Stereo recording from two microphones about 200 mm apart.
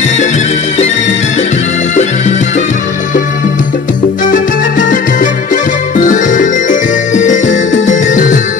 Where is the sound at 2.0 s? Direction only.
35° left (ahead or behind).